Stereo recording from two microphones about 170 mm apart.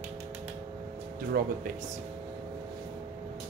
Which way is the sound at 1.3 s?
60° right (ahead or behind).